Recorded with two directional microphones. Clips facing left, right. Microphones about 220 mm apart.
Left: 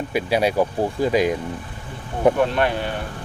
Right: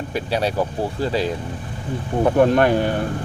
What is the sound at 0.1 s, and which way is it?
Speech, 10° left (ahead or behind).